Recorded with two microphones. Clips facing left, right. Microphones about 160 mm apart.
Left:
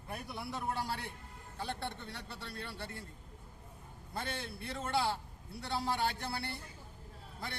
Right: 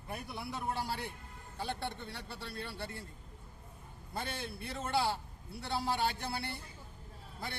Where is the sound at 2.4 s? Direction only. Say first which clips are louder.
Right 3 dB; 30° right (ahead or behind).